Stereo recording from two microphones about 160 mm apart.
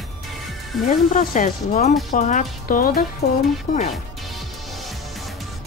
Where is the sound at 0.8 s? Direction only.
50° left (ahead or behind).